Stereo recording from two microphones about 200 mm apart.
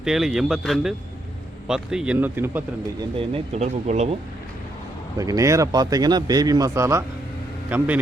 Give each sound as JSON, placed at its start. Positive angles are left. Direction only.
{"t": 0.0, "sound": "a man's voice", "side_deg": 0}
{"t": 3.2, "sound": "speech", "side_deg": -30}
{"t": 5.1, "sound": "a man's voice", "side_deg": -15}